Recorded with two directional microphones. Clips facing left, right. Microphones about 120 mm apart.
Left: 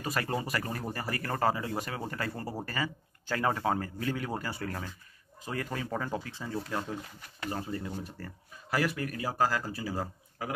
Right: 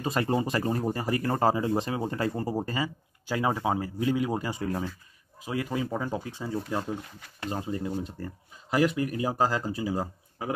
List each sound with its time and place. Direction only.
0.0 s speech: 25° right (ahead or behind)